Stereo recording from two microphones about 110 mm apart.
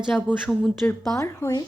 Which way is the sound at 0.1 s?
10° left (ahead or behind).